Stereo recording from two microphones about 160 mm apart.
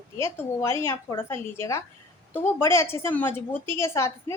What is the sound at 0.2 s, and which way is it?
A woman's voice, 15° left (ahead or behind).